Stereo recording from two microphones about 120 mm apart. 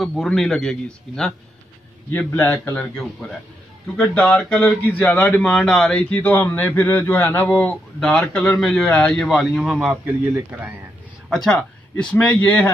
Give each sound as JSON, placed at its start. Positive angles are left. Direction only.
{"t": 0.0, "sound": "a man's voice", "side_deg": 5}
{"t": 2.0, "sound": "a man's voice", "side_deg": 15}
{"t": 4.3, "sound": "a man's voice", "side_deg": 5}
{"t": 9.3, "sound": "a man's voice", "side_deg": 0}
{"t": 11.2, "sound": "a man's voice", "side_deg": 0}